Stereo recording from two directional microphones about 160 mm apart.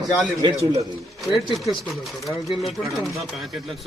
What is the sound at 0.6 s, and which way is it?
Speech, 20° right (ahead or behind).